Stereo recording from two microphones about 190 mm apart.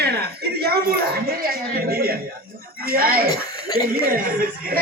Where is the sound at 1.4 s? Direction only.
50° right (ahead or behind).